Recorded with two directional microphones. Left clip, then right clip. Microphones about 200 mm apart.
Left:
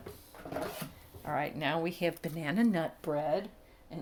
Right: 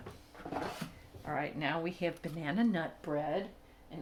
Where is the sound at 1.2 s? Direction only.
45° left (ahead or behind).